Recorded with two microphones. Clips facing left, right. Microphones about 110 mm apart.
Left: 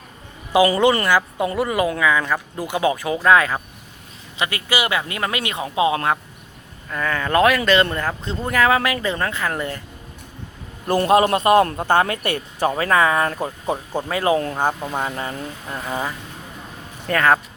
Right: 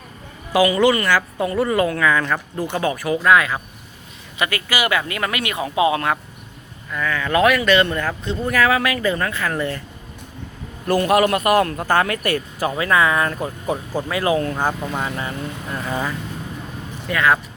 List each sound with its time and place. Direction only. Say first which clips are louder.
0.5 s speech: even; 25° left (ahead or behind)
11.0 s speech: left 2 dB; 25° left (ahead or behind)
15.0 s speech: even; 30° left (ahead or behind)
15.9 s speech: right 1 dB; 15° left (ahead or behind)
17.1 s speech: left 1 dB; 45° left (ahead or behind)